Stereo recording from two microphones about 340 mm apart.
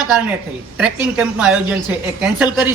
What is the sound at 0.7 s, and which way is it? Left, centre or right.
A man's voice, centre.